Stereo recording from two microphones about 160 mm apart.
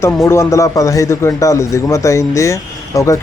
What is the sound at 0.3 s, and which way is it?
A man's voice, 20° left (ahead or behind).